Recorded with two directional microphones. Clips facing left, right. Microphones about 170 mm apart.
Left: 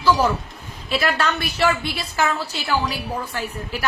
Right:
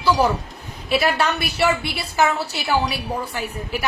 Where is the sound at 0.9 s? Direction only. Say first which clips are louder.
Right 2 dB; 10° right (ahead or behind).